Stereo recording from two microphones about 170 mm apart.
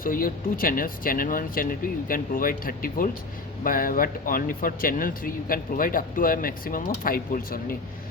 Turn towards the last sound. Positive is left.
turn(degrees=55)  # may be behind; listen again after turning